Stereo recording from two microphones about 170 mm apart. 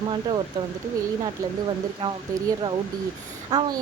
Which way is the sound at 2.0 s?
30° right (ahead or behind).